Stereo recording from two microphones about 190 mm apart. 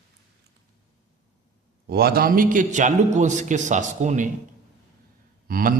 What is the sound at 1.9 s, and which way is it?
A man's voice, 55° right (ahead or behind).